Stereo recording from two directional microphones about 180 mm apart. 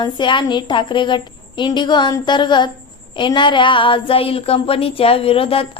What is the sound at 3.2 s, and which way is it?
Child singing, 25° left (ahead or behind).